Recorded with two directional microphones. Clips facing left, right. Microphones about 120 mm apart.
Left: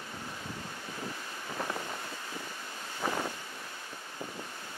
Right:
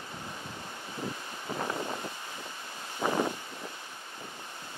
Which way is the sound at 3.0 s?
25° right (ahead or behind).